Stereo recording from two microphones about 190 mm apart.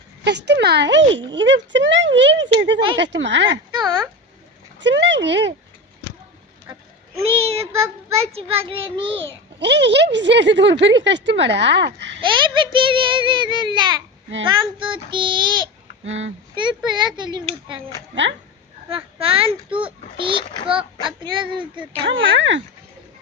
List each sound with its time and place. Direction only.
0.3 s speech: 65° right (ahead or behind)
4.8 s speech: 70° right (ahead or behind)
7.2 s a child's voice: 30° right (ahead or behind)
9.6 s a child's voice: 65° right (ahead or behind)
12.2 s a child's voice: 25° right (ahead or behind)
16.0 s speech: 80° right
16.6 s a child's voice: 25° right (ahead or behind)
18.1 s speech: 75° right (ahead or behind)
18.9 s a child's voice: 30° right (ahead or behind)
22.0 s speech: 85° right